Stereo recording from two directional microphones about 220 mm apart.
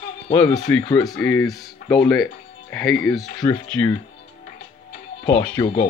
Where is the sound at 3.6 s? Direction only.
5° left (ahead or behind).